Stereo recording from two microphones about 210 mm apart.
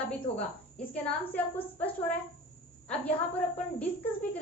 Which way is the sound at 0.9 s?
5° left (ahead or behind).